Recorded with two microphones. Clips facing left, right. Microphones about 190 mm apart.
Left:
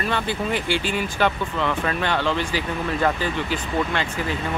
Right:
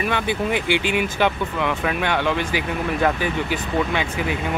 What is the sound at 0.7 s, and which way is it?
Speech, 65° right (ahead or behind).